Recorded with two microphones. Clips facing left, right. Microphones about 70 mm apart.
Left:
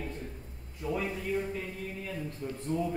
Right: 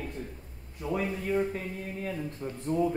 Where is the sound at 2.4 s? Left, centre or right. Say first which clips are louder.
Right 1 dB; right.